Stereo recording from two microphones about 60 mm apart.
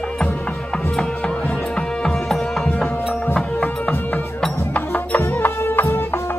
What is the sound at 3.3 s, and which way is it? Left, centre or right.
Music, left.